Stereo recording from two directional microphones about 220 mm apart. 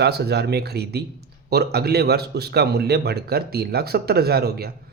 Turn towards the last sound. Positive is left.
turn(degrees=-45)  # may be behind; listen again after turning